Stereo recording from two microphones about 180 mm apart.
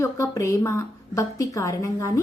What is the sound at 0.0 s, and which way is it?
A woman's voice, 15° left (ahead or behind).